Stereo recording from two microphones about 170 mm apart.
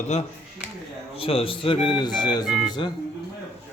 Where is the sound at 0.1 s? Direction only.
40° left (ahead or behind).